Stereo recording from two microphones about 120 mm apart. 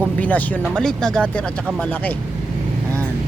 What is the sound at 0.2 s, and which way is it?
Speech, 15° left (ahead or behind).